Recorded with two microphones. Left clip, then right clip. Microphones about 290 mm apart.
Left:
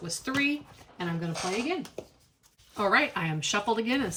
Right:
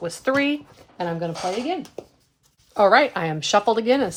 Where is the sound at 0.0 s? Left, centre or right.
Centre.